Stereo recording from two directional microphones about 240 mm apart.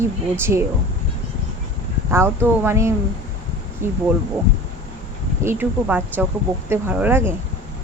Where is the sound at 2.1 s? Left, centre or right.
Centre.